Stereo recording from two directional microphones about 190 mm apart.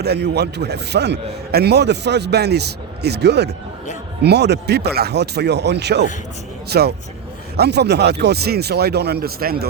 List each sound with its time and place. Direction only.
0.0 s a man's voice: 60° right (ahead or behind)